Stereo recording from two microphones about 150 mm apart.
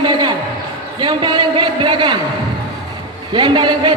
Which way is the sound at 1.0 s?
30° right (ahead or behind).